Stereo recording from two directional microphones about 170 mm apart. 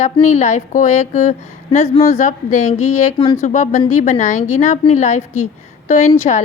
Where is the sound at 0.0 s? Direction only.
45° left (ahead or behind).